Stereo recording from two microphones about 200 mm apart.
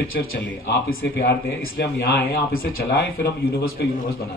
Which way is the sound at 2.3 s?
50° left (ahead or behind).